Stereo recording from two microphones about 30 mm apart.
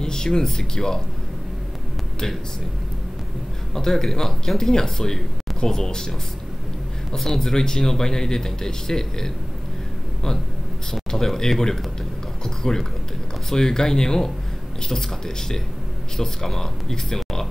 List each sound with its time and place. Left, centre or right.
0.0 s speech: left
3.7 s speech: centre
7.2 s speech: centre
10.9 s speech: centre